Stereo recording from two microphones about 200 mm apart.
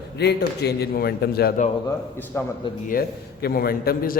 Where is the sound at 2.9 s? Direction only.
50° left (ahead or behind).